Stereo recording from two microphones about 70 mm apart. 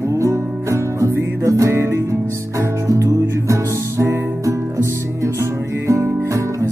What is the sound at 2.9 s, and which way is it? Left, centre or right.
Music, right.